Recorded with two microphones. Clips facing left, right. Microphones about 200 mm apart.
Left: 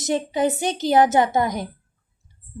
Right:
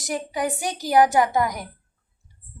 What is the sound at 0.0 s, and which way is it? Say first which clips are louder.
A woman's voice: left 5 dB; 25° left (ahead or behind).